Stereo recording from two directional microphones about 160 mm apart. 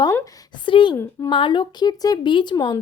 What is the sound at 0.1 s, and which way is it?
Speech, 20° left (ahead or behind).